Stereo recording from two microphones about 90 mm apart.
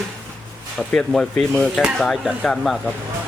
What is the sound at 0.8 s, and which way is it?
Speech, 10° left (ahead or behind).